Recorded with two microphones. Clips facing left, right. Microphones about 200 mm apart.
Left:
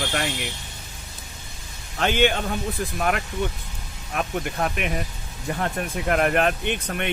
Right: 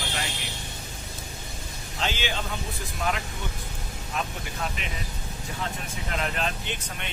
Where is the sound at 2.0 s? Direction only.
55° left (ahead or behind).